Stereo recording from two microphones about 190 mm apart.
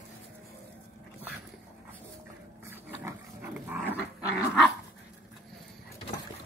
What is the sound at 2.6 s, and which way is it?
Dog, 10° right (ahead or behind).